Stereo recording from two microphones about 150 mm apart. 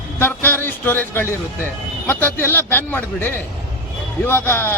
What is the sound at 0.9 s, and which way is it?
Speech, 15° left (ahead or behind).